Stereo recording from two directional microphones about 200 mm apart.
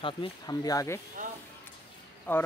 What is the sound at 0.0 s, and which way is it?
Speech, 25° left (ahead or behind).